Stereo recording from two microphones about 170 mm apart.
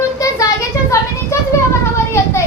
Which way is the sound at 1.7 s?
15° left (ahead or behind).